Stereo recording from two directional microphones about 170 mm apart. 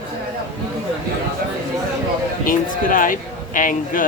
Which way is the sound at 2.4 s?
50° left (ahead or behind).